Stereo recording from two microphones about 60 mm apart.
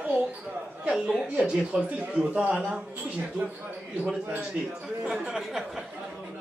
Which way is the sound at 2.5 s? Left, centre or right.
Centre.